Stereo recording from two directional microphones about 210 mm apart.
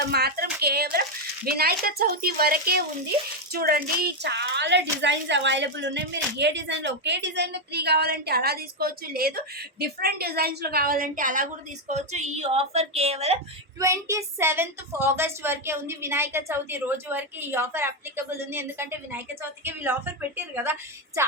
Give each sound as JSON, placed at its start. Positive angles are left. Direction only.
{"t": 0.1, "sound": "a sound", "side_deg": -50}
{"t": 1.5, "sound": "a woman's voice", "side_deg": -45}
{"t": 13.7, "sound": "a woman's voice", "side_deg": -15}